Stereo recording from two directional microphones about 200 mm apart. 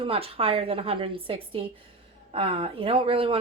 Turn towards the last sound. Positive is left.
turn(degrees=-30)  # may be behind; listen again after turning